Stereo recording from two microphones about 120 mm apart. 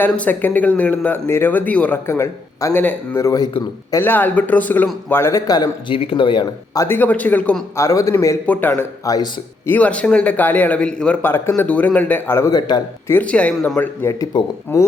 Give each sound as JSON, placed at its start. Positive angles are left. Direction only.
{"t": 0.0, "sound": "a man's voice", "side_deg": 15}
{"t": 2.0, "sound": "a man's voice", "side_deg": 25}
{"t": 2.8, "sound": "a man's voice", "side_deg": 15}
{"t": 3.2, "sound": "speech", "side_deg": 30}
{"t": 3.9, "sound": "a man's voice", "side_deg": 15}
{"t": 5.9, "sound": "speech", "side_deg": 50}
{"t": 6.7, "sound": "a man's voice", "side_deg": 20}
{"t": 7.8, "sound": "a man's voice", "side_deg": 25}
{"t": 9.6, "sound": "a man's voice", "side_deg": 15}
{"t": 12.5, "sound": "speech", "side_deg": 35}
{"t": 13.1, "sound": "a man's voice", "side_deg": 15}